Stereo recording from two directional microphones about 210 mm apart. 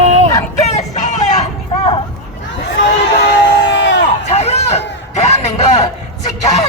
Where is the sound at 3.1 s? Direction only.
50° left (ahead or behind).